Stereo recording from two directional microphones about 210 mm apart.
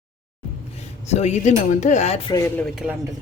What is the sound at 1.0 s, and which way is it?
Speech, 35° left (ahead or behind).